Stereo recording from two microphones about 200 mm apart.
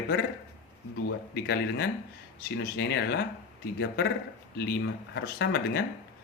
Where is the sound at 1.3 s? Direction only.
55° left (ahead or behind).